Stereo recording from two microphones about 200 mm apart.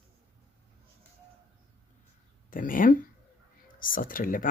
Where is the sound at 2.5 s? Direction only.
45° left (ahead or behind).